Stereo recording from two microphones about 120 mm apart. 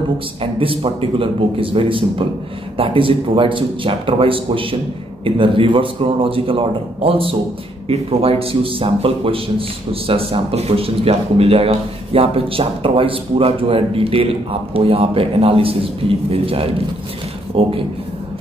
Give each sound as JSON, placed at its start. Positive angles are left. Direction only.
{"t": 0.4, "sound": "a man's voice", "side_deg": -50}